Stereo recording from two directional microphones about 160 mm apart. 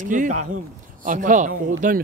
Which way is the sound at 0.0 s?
50° right (ahead or behind).